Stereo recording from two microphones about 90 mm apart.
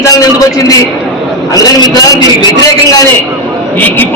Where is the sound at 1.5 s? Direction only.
40° left (ahead or behind).